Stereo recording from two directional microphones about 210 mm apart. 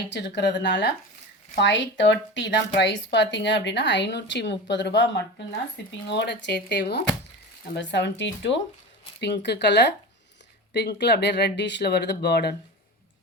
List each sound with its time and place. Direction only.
0.1 s a woman's voice: 55° left (ahead or behind)